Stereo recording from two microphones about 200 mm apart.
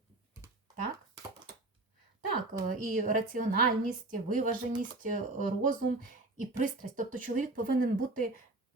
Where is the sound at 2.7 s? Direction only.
45° right (ahead or behind).